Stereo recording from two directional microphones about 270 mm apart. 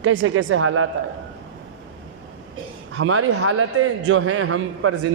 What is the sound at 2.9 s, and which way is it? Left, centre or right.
A man's voice, right.